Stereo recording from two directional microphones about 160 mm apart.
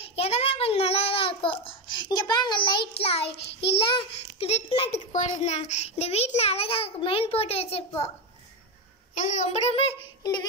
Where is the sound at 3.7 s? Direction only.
35° left (ahead or behind).